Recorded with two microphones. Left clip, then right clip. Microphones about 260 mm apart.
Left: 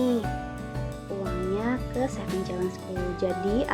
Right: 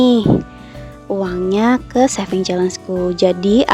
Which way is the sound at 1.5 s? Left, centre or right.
Right.